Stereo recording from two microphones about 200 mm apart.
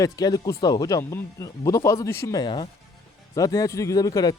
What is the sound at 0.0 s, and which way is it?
Speech, 20° left (ahead or behind).